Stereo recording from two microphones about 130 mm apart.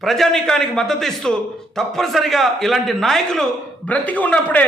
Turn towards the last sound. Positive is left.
turn(degrees=10)  # may be behind; listen again after turning